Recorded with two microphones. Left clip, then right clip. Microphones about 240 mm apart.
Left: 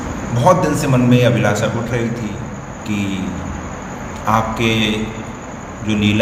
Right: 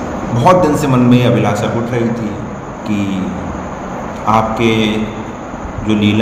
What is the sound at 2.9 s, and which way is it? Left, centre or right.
Speech, left.